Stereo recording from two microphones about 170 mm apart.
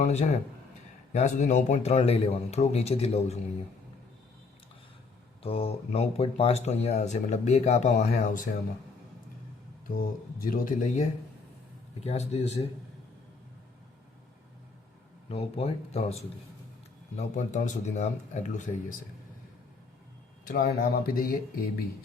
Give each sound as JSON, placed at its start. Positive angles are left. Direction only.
{"t": 0.0, "sound": "speech", "side_deg": 40}
{"t": 5.4, "sound": "speech", "side_deg": 35}
{"t": 9.8, "sound": "speech", "side_deg": 55}
{"t": 15.3, "sound": "speech", "side_deg": 35}
{"t": 17.2, "sound": "speech", "side_deg": 45}
{"t": 20.4, "sound": "speech", "side_deg": 60}